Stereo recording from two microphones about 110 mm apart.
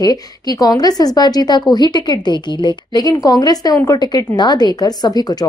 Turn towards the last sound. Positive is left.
turn(degrees=35)  # may be behind; listen again after turning